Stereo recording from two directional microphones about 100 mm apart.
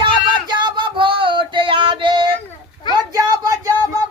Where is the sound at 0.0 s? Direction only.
50° right (ahead or behind).